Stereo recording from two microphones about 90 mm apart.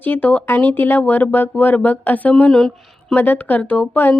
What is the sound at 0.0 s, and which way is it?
Speech, 20° left (ahead or behind).